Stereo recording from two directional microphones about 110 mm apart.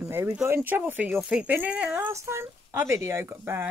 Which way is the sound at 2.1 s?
25° right (ahead or behind).